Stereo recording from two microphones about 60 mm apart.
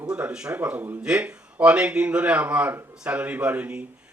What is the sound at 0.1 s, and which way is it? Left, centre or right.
Speech, centre.